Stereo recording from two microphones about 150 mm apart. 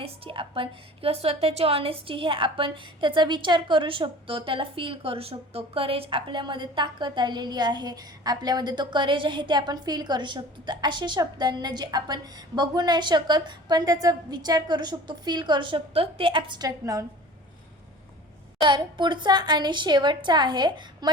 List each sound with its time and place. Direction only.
0.0 s a woman's voice: 35° right (ahead or behind); by 17.1 s 20° right (ahead or behind)
18.6 s a woman's voice: 30° right (ahead or behind)